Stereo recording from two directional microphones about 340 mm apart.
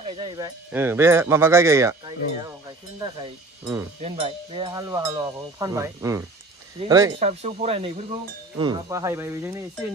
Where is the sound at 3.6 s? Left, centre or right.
Centre.